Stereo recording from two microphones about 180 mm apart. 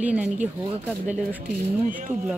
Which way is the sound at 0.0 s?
5° right (ahead or behind).